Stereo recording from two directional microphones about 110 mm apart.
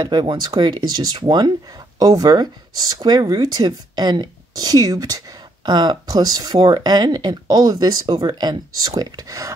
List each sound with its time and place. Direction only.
0.0 s speech: 45° right (ahead or behind)